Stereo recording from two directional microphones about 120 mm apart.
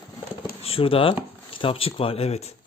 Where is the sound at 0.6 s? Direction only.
50° left (ahead or behind).